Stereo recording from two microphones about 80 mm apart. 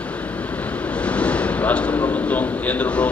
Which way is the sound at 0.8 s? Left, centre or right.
Centre.